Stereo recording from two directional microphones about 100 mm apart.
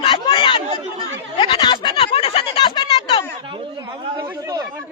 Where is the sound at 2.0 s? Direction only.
75° left (ahead or behind).